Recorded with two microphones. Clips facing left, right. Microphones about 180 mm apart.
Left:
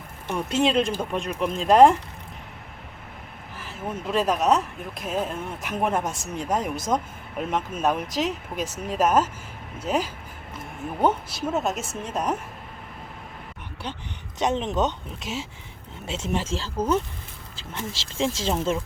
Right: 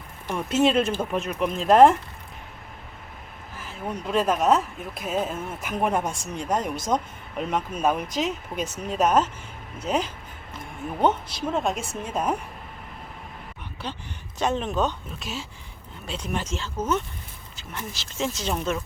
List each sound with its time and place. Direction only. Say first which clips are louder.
0.3 s speech: right 1 dB; 5° right (ahead or behind)
3.6 s speech: even; centre (ahead or behind)
14.3 s speech: left 1 dB; 20° left (ahead or behind)